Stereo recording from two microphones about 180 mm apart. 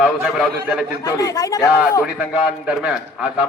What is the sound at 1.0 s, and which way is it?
Speech, 20° left (ahead or behind).